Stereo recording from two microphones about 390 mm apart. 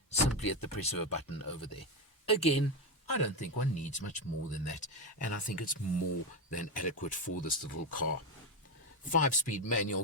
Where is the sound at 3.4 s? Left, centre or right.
Centre.